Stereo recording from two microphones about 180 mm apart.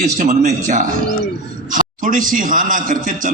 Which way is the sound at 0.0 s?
45° right (ahead or behind).